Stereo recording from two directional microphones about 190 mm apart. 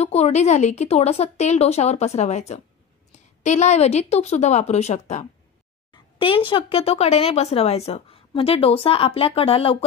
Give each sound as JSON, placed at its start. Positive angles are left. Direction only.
{"t": 0.0, "sound": "a woman's voice", "side_deg": 35}